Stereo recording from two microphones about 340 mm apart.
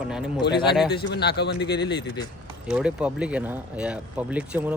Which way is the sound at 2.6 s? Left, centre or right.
Centre.